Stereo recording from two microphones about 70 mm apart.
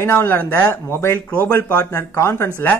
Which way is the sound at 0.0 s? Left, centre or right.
Left.